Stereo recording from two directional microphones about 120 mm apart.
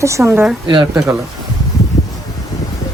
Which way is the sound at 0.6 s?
40° right (ahead or behind).